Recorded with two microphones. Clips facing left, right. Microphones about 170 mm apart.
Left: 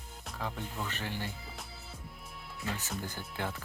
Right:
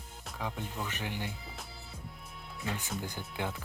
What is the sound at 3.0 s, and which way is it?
Speech, 15° right (ahead or behind).